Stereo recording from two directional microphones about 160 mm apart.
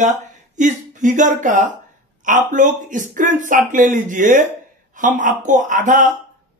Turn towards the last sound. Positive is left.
turn(degrees=-50)  # may be behind; listen again after turning